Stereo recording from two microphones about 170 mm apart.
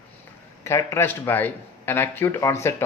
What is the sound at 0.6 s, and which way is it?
Speech, 15° left (ahead or behind).